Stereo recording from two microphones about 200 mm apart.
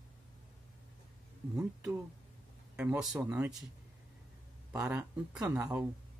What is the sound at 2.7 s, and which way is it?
Speech, 5° right (ahead or behind).